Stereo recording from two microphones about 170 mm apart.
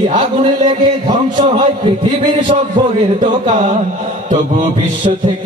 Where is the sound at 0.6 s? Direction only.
30° right (ahead or behind).